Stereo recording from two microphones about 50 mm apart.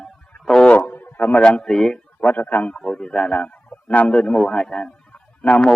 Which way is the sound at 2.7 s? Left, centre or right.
Centre.